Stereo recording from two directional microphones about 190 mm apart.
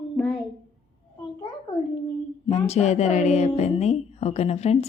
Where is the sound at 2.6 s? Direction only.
35° left (ahead or behind).